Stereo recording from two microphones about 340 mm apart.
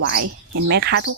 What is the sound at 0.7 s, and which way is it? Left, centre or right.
Speech, right.